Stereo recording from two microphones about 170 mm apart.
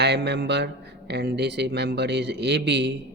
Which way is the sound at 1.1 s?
80° right.